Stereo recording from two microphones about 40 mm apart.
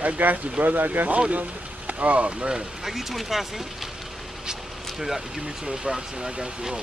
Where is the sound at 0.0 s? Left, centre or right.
Right.